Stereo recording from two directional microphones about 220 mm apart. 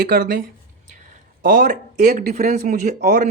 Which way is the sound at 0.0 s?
40° right (ahead or behind).